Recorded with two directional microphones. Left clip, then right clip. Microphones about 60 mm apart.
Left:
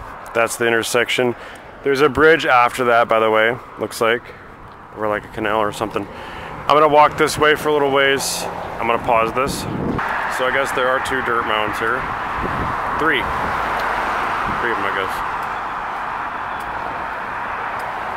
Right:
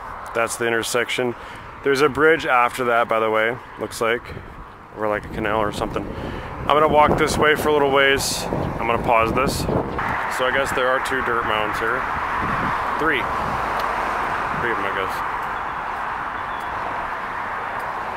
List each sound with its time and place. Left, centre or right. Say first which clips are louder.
0.3 s speech: left 4 dB; centre
5.0 s speech: left 2 dB; centre
7.5 s speech: left 1 dB; centre
9.9 s speech: left 2 dB; left
10.3 s speech: left 1 dB; centre
12.9 s speech: left 5 dB; centre
13.3 s a sound: left 3 dB; left
13.8 s a sound: left 3 dB; left
14.7 s speech: left 3 dB; left